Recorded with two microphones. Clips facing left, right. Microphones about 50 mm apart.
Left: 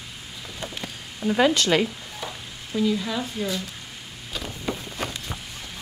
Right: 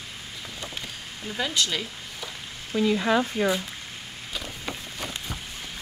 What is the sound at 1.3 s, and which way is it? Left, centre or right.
Speech, left.